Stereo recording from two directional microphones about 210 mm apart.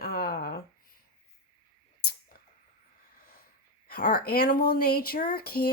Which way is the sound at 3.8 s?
45° left (ahead or behind).